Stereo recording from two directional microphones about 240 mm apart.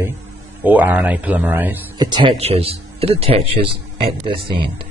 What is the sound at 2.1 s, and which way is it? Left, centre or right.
Speech, centre.